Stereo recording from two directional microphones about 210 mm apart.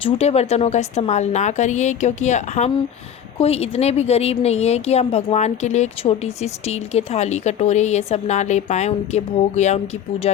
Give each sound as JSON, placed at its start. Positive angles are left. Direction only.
{"t": 0.0, "sound": "a woman's voice", "side_deg": 30}